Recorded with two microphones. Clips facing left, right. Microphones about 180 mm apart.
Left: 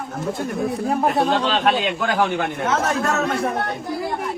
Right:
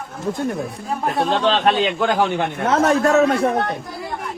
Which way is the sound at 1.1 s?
Centre (ahead or behind).